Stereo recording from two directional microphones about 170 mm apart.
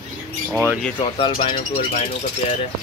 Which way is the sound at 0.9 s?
30° left (ahead or behind).